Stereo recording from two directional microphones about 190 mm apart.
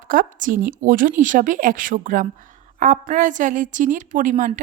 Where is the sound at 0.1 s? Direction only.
45° right (ahead or behind).